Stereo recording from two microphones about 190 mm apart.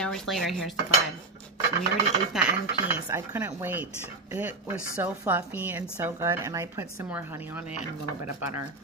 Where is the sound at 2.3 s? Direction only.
5° right (ahead or behind).